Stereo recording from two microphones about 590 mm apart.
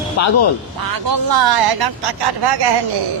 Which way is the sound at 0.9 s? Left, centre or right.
Right.